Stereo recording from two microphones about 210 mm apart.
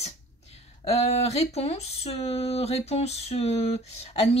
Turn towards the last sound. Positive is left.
turn(degrees=30)  # may be behind; listen again after turning